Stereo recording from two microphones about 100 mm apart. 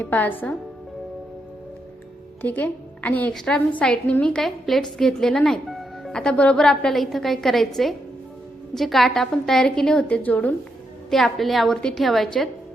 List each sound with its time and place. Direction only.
0.0 s a woman's voice: 20° left (ahead or behind)
2.4 s a woman's voice: 20° left (ahead or behind)
11.1 s a woman's voice: centre (ahead or behind)